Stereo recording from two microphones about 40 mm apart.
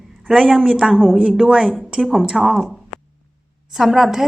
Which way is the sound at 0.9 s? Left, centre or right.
Centre.